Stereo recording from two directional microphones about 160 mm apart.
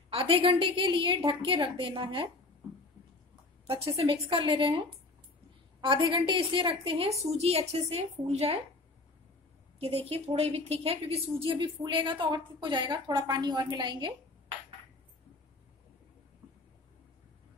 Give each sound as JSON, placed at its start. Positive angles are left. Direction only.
{"t": 0.1, "sound": "a woman's voice", "side_deg": -35}
{"t": 3.6, "sound": "a woman's voice", "side_deg": -35}
{"t": 9.8, "sound": "a woman's voice", "side_deg": -40}